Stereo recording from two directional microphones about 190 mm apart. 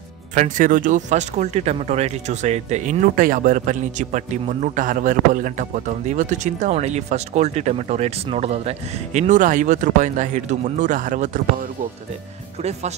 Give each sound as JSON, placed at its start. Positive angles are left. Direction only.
{"t": 0.3, "sound": "speech", "side_deg": -40}